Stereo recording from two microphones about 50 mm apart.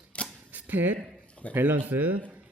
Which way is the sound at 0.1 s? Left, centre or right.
Left.